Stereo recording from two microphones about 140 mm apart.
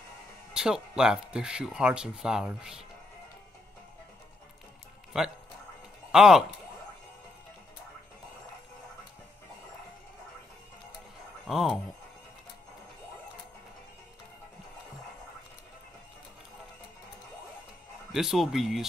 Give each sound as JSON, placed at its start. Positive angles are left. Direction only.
{"t": 0.5, "sound": "speech", "side_deg": -5}
{"t": 5.1, "sound": "speech", "side_deg": -5}
{"t": 11.4, "sound": "speech", "side_deg": -5}
{"t": 18.1, "sound": "speech", "side_deg": 0}